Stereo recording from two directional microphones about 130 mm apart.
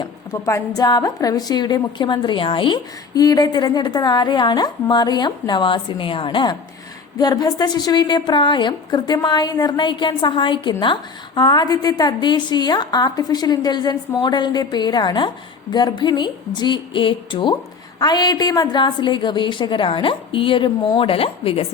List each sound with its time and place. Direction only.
0.3 s a woman's voice: 20° left (ahead or behind); by 21.7 s 45° left (ahead or behind)